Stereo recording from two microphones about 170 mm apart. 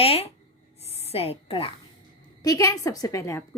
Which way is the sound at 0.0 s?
35° left (ahead or behind).